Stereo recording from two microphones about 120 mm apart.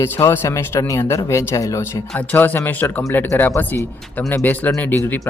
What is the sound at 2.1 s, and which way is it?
Speech, 15° left (ahead or behind).